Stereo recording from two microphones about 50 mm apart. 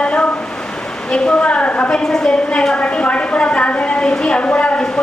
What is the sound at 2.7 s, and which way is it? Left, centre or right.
A woman's voice, left.